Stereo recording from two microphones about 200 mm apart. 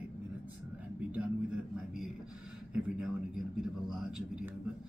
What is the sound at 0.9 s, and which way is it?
Speech, 5° right (ahead or behind).